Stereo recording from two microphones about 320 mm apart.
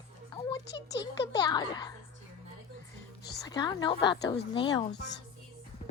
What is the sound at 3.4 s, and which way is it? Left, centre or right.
A woman's voice, centre.